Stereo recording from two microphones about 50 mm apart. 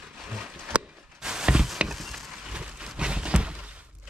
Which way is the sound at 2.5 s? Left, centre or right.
Centre.